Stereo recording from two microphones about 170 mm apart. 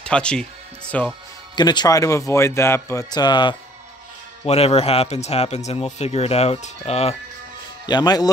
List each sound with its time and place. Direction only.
0.0 s speech: 5° left (ahead or behind)
1.5 s speech: 25° left (ahead or behind)
4.5 s a man's voice: 35° left (ahead or behind)
7.8 s speech: 25° left (ahead or behind)